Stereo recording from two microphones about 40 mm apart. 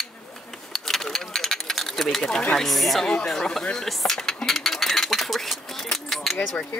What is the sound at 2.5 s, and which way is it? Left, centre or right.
Speech, centre.